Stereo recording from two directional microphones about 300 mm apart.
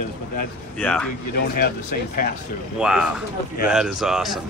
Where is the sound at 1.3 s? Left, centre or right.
Left.